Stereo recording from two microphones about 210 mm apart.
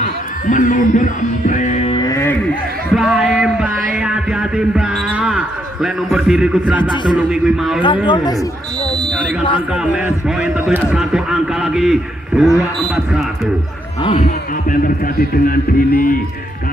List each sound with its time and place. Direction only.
0.5 s music: 35° left (ahead or behind)
2.0 s music: 15° left (ahead or behind)
2.9 s a sound: centre (ahead or behind)
6.8 s speech: 20° left (ahead or behind)
7.2 s a man's voice: 5° right (ahead or behind)
8.1 s speech: 20° left (ahead or behind)
9.7 s a man's voice: 5° right (ahead or behind)
14.2 s speech: 45° left (ahead or behind)